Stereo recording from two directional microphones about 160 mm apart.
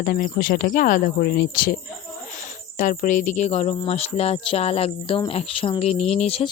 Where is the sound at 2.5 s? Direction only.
55° left (ahead or behind).